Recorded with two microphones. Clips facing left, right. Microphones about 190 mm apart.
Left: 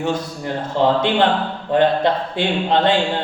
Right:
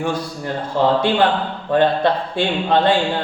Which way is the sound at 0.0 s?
20° left (ahead or behind).